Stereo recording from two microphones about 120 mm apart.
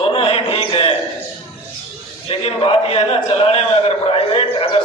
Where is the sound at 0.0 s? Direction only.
50° left (ahead or behind).